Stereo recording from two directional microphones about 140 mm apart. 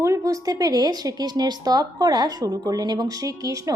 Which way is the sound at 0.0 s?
25° right (ahead or behind).